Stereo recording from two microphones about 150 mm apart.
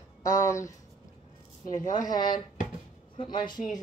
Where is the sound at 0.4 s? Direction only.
20° left (ahead or behind).